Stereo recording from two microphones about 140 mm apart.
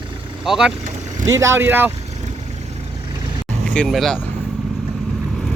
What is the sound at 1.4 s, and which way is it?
Speech, 20° right (ahead or behind).